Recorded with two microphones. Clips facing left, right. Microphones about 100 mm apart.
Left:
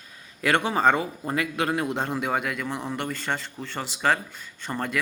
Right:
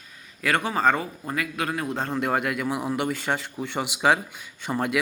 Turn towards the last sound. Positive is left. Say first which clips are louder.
# right 4 dB
turn(degrees=-10)  # may be behind; listen again after turning